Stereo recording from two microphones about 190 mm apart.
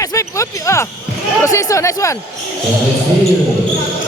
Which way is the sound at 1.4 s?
15° left (ahead or behind).